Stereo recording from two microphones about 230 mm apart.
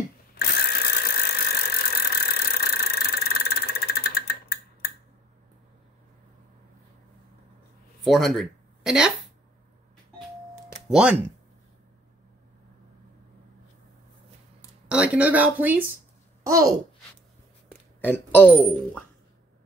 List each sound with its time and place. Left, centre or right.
0.4 s engine: left
8.0 s speech: centre
10.7 s a sound: centre
14.9 s a child's voice: centre
18.0 s speech: centre